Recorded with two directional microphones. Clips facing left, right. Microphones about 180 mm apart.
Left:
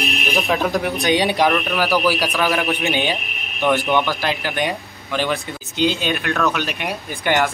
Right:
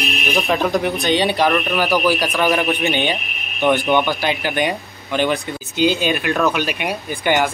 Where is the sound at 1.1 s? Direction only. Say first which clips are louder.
Even; 10° left (ahead or behind).